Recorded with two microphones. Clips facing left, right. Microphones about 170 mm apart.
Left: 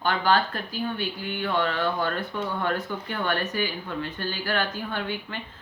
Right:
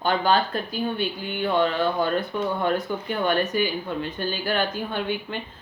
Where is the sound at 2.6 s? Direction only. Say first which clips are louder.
Right 4 dB; 20° right (ahead or behind).